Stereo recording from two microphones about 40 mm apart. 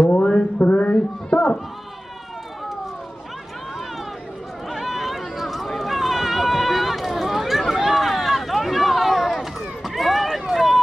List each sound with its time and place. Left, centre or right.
0.0 s mantra: left
0.4 s a sound: left
1.3 s sheep: centre
4.6 s run: centre